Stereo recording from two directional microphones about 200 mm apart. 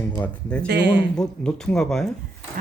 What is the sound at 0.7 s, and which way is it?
Speech, 60° right (ahead or behind).